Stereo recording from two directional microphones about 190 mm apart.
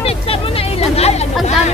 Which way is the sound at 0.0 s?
30° left (ahead or behind).